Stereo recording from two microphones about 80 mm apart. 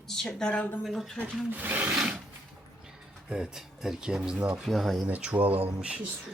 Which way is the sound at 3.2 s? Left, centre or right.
Centre.